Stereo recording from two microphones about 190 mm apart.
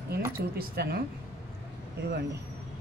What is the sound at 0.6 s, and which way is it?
Speech, 55° right (ahead or behind).